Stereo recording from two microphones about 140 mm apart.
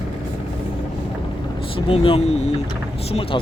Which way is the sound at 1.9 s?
40° left (ahead or behind).